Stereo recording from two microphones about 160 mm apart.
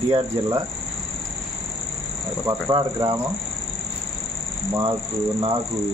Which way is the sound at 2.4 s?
20° right (ahead or behind).